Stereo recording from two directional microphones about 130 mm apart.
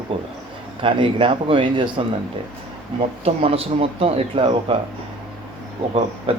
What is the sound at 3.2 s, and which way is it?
Speech, 50° right (ahead or behind).